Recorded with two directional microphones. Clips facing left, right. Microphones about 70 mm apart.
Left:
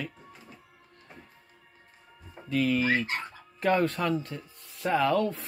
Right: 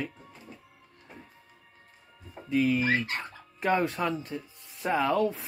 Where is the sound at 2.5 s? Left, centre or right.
Centre.